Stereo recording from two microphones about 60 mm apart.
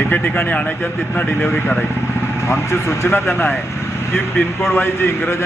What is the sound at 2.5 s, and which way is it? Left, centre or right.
A man's voice, left.